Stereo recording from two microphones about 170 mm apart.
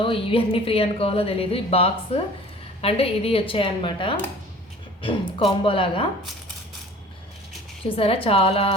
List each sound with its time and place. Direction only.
0.0 s a woman's voice: 30° left (ahead or behind)
7.9 s a woman's voice: 35° left (ahead or behind)